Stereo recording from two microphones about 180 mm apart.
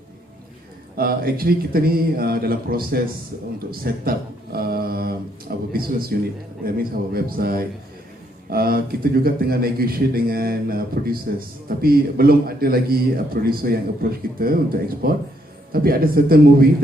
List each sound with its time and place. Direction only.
0.9 s a man's voice: 55° right (ahead or behind)
4.5 s a sound: 55° right (ahead or behind)
6.7 s a man's voice: 55° right (ahead or behind)